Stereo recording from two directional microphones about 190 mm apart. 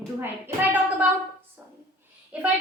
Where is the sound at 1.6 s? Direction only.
10° right (ahead or behind).